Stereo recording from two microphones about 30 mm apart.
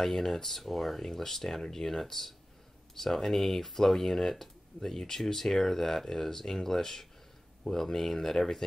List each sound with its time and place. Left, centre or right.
0.0 s speech: centre